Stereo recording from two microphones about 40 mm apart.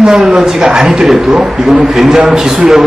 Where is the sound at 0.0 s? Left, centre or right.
Right.